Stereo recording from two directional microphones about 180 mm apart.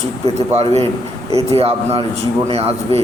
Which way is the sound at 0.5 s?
35° right (ahead or behind).